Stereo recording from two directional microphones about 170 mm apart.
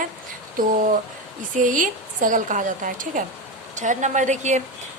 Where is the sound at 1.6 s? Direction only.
50° right (ahead or behind).